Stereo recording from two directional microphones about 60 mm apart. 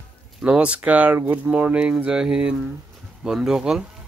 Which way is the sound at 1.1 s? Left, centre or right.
Right.